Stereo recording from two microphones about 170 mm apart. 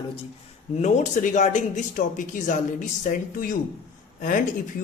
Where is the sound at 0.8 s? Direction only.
45° left (ahead or behind).